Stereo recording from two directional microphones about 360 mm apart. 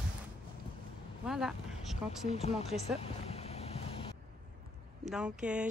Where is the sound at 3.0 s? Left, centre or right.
Centre.